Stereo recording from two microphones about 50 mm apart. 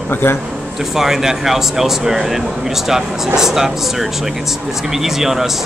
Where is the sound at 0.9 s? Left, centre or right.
Centre.